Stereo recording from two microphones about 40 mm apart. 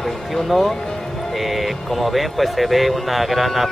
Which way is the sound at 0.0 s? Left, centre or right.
Centre.